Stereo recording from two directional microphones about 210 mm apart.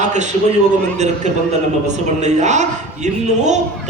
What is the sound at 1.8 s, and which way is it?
A man's voice, 35° right (ahead or behind).